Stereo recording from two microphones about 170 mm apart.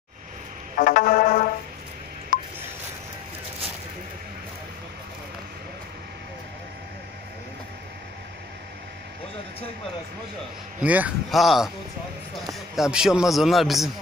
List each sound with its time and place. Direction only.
0.7 s music: 55° left (ahead or behind)
2.3 s telephone dialing: 50° left (ahead or behind)
10.8 s a man's voice: 10° right (ahead or behind)
12.7 s a man's voice: 5° right (ahead or behind)